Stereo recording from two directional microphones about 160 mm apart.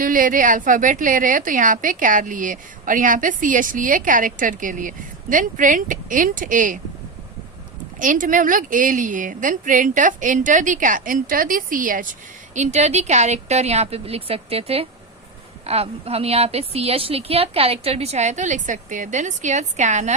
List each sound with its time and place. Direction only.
0.0 s a woman's voice: 55° right (ahead or behind)
7.9 s a woman's voice: 55° right (ahead or behind)
12.5 s a woman's voice: 45° right (ahead or behind)